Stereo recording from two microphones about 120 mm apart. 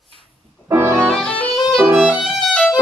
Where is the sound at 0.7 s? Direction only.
20° right (ahead or behind).